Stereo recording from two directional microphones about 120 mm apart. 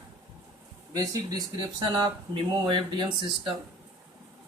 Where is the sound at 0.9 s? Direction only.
30° right (ahead or behind).